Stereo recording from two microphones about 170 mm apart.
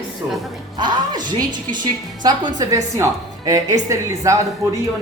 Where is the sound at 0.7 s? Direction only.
25° right (ahead or behind).